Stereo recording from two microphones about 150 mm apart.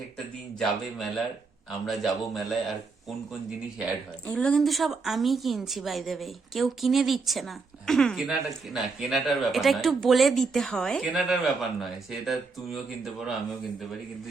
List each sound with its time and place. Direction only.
0.6 s a woman's voice: centre (ahead or behind)
4.3 s a woman's voice: 5° left (ahead or behind)